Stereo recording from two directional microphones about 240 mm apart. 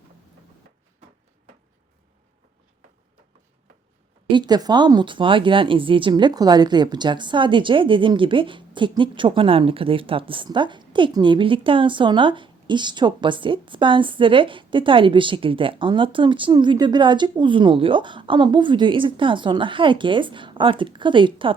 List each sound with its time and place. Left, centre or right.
4.3 s speech: centre